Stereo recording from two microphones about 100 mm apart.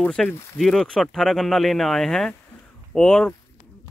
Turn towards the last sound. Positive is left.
turn(degrees=5)  # may be behind; listen again after turning